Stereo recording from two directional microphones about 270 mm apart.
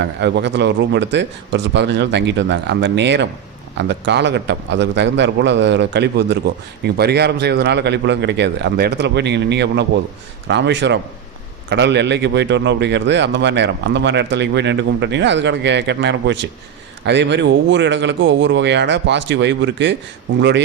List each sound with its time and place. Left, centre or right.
0.0 s a man's voice: right